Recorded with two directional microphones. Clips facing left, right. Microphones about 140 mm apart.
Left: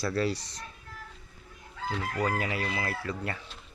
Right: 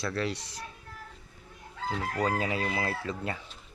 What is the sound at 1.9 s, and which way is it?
Chicken, 25° right (ahead or behind).